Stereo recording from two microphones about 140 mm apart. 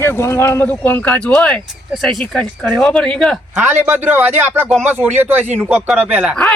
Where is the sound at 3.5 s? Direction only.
15° right (ahead or behind).